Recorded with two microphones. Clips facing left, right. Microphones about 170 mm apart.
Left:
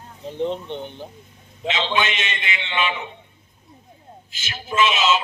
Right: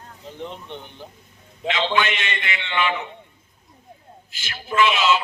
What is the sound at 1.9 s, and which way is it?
A man's voice, 20° left (ahead or behind).